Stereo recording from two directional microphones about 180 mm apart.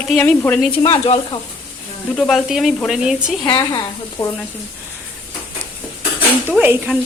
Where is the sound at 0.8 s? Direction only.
25° left (ahead or behind).